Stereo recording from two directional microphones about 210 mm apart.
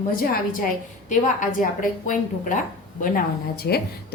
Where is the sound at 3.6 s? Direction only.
50° left (ahead or behind).